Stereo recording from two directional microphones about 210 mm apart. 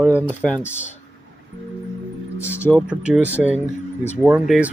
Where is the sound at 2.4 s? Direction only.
10° left (ahead or behind).